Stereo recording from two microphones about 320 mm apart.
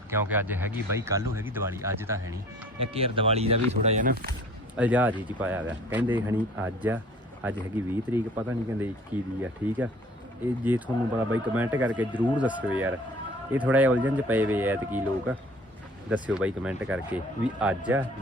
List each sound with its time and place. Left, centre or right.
0.1 s speech: centre; by 4.4 s right
4.8 s speech: centre